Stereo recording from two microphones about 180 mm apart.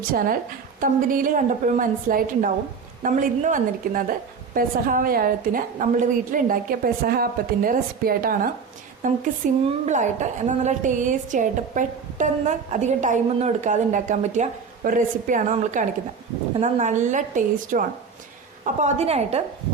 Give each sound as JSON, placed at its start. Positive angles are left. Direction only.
{"t": 0.8, "sound": "a woman's voice", "side_deg": -50}